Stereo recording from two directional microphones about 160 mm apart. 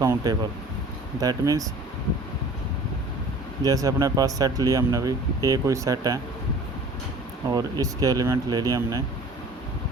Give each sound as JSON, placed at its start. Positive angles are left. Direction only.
{"t": 0.0, "sound": "speech", "side_deg": -20}
{"t": 3.6, "sound": "speech", "side_deg": -20}
{"t": 7.5, "sound": "speech", "side_deg": -25}